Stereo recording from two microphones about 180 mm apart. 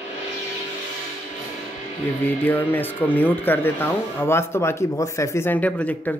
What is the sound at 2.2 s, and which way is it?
Speech, 10° left (ahead or behind).